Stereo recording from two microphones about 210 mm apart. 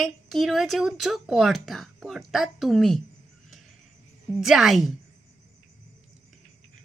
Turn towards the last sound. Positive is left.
turn(degrees=0)  # may be behind; listen again after turning